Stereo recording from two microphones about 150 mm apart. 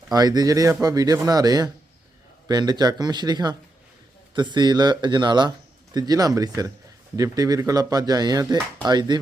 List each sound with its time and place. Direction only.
0.1 s speech: 25° right (ahead or behind)